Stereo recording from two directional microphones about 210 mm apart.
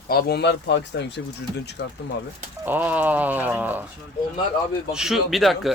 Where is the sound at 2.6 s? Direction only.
10° right (ahead or behind).